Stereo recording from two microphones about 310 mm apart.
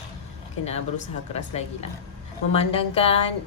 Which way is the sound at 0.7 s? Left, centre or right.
Left.